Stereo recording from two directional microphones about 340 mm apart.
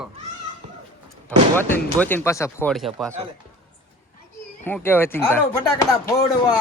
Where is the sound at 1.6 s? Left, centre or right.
Centre.